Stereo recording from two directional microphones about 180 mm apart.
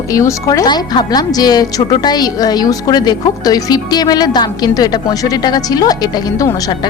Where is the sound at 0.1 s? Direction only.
15° left (ahead or behind).